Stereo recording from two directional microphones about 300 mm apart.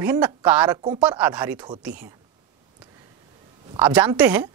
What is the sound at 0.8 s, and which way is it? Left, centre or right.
Speech, centre.